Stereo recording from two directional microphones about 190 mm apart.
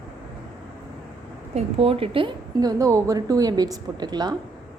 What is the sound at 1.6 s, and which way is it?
A woman's voice, 30° right (ahead or behind).